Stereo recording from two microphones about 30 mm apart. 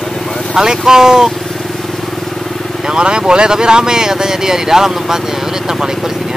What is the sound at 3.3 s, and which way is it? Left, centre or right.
Speech, right.